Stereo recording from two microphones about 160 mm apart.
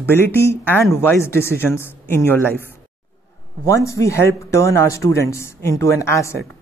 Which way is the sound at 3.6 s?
20° left (ahead or behind).